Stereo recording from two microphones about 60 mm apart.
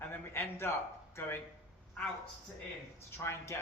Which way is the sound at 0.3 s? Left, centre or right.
Left.